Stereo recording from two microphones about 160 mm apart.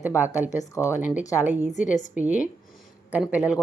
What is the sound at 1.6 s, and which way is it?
Speech, 50° left (ahead or behind).